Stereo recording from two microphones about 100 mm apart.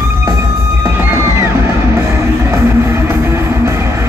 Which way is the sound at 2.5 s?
25° right (ahead or behind).